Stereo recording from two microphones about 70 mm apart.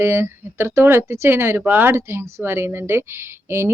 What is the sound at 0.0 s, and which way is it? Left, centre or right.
A woman's voice, right.